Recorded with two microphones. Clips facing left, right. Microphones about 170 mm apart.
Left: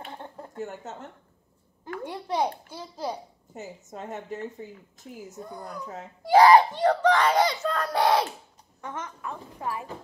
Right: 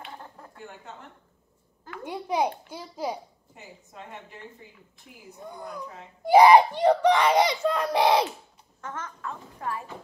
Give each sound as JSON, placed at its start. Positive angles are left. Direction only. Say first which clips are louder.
{"t": 0.6, "sound": "a woman's voice", "louder": "left 8 dB", "side_deg": 45}
{"t": 2.0, "sound": "a child's voice", "louder": "right 1 dB", "side_deg": -10}
{"t": 3.5, "sound": "a woman's voice", "louder": "left 7 dB", "side_deg": 45}
{"t": 6.2, "sound": "a child's voice", "louder": "right 1 dB", "side_deg": -10}
{"t": 8.8, "sound": "a woman's voice", "louder": "left 1 dB", "side_deg": 15}